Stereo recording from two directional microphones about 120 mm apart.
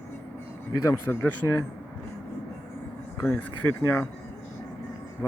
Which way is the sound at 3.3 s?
20° left (ahead or behind).